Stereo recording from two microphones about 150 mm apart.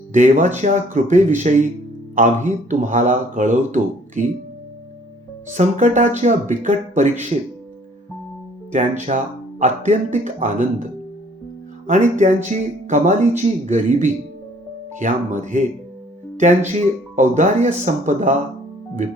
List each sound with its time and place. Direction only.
0.1 s speech: 55° right (ahead or behind)
5.5 s speech: 55° right (ahead or behind)
8.7 s speech: 55° right (ahead or behind)
11.9 s speech: 55° right (ahead or behind)
17.2 s speech: 55° right (ahead or behind)